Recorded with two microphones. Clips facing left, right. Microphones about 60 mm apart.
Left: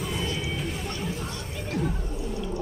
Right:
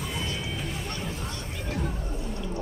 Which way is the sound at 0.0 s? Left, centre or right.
Centre.